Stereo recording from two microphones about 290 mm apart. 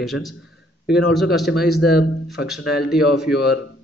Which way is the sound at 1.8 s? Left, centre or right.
Left.